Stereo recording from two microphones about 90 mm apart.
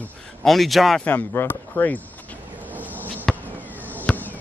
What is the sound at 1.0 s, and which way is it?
Speech, 25° left (ahead or behind).